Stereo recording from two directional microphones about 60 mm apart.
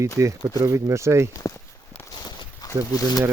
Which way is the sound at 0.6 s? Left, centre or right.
Right.